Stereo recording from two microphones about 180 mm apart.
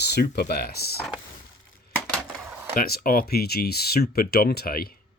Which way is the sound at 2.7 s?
55° left (ahead or behind).